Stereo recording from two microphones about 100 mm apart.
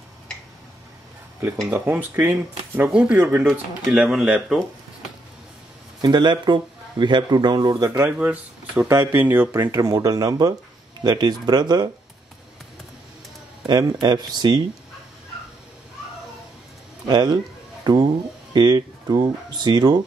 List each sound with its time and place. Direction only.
1.7 s speech: 20° right (ahead or behind)
5.9 s speech: 45° right (ahead or behind)
8.0 s speech: 15° right (ahead or behind)
9.7 s speech: 40° right (ahead or behind)
13.7 s speech: 45° right (ahead or behind)
17.1 s speech: 45° right (ahead or behind)